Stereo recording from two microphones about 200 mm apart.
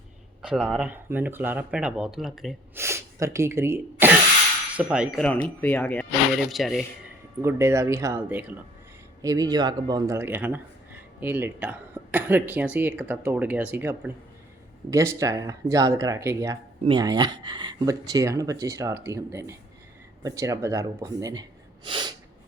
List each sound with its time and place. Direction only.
0.4 s speech: centre (ahead or behind)
2.7 s speech: 15° right (ahead or behind)
7.4 s speech: 15° right (ahead or behind)
9.2 s speech: 20° right (ahead or behind)
21.8 s sneeze: 25° right (ahead or behind)